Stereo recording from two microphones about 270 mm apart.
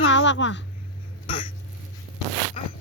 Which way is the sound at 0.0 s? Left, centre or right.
Left.